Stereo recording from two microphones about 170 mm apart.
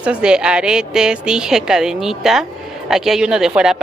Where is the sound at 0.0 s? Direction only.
5° right (ahead or behind).